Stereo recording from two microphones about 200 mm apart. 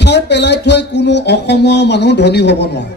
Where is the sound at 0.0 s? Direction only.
60° left (ahead or behind).